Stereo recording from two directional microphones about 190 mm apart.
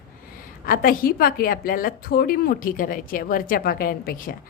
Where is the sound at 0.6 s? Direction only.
50° left (ahead or behind).